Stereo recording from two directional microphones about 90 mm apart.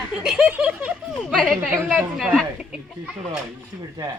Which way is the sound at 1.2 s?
Centre (ahead or behind).